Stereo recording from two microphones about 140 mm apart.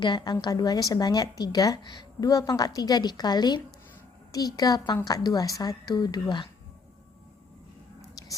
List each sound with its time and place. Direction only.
0.0 s a woman's voice: 35° left (ahead or behind)